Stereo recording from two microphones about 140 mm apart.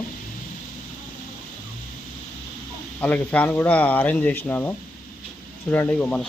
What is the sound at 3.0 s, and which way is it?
Speech, 10° left (ahead or behind).